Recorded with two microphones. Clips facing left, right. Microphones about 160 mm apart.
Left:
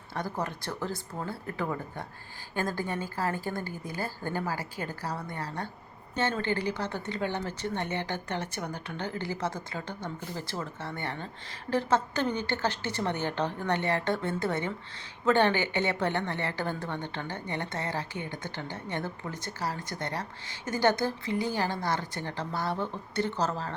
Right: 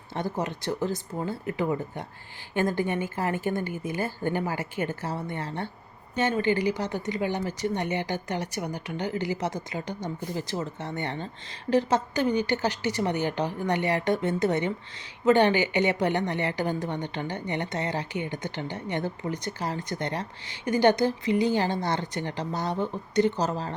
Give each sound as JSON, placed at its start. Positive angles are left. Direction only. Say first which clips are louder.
{"t": 0.1, "sound": "a woman's voice", "louder": "right 4 dB", "side_deg": -20}